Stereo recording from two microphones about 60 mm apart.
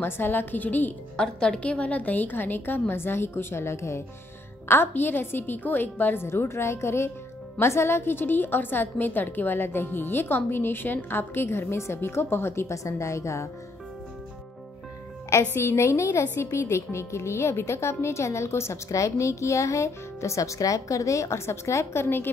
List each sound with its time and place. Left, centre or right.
0.0 s a woman's voice: left
1.1 s a woman's voice: centre; by 4.0 s left
4.6 s a woman's voice: left
6.2 s a woman's voice: left
12.7 s a woman's voice: left
15.5 s a woman's voice: left